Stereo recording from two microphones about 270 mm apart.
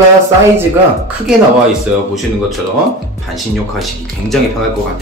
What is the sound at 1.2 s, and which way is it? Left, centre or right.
Speech, centre.